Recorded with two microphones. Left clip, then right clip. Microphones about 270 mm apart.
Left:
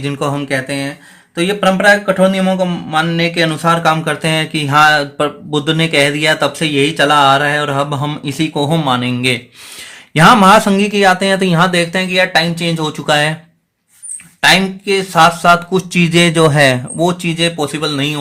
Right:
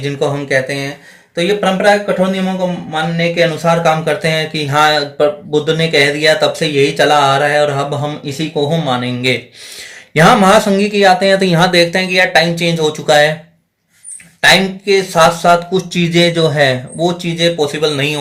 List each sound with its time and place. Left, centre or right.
0.0 s speech: left
14.4 s speech: left